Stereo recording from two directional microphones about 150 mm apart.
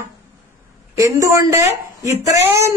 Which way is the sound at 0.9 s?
20° right (ahead or behind).